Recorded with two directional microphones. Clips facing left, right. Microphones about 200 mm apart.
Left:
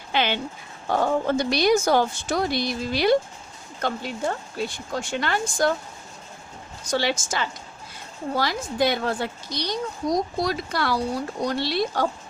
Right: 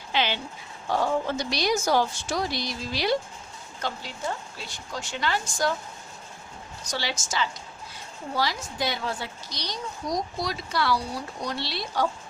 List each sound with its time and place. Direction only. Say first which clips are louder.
0.1 s a woman's voice: left 3 dB; 55° left (ahead or behind)
6.8 s a woman's voice: left 8 dB; 55° left (ahead or behind)